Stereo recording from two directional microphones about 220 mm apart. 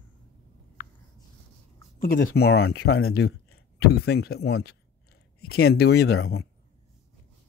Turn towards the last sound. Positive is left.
turn(degrees=50)  # may be behind; listen again after turning